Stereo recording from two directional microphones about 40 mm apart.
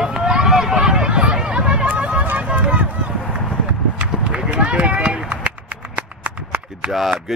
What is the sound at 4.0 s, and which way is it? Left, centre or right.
Run, right.